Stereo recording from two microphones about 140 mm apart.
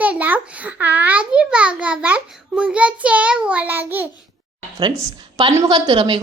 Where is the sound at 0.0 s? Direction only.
10° right (ahead or behind).